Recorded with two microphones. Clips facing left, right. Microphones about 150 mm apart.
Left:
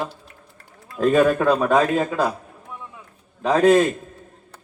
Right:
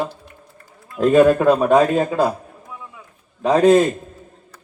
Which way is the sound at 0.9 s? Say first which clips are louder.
Right 4 dB; 15° right (ahead or behind).